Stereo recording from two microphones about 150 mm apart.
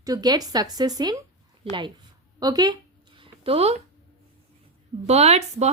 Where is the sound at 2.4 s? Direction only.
25° right (ahead or behind).